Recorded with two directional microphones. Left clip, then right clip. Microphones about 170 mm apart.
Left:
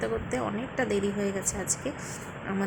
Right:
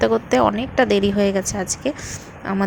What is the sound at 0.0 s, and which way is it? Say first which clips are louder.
Speech: right 14 dB; 45° right (ahead or behind).